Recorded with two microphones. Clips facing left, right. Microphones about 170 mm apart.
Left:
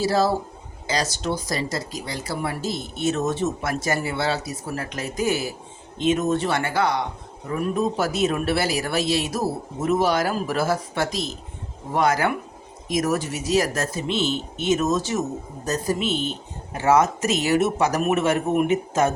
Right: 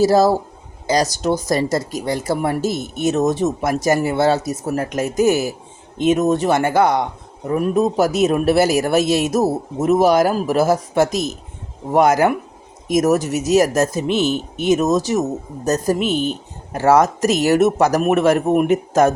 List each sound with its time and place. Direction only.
0.0 s speech: 40° right (ahead or behind)
16.1 s speech: 5° right (ahead or behind)
16.7 s speech: 40° right (ahead or behind)